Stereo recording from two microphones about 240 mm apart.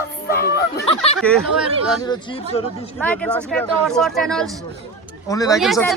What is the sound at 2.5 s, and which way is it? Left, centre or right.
Speech, left.